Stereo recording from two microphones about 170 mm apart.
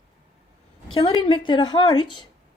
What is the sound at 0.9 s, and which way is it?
A woman's voice, 30° left (ahead or behind).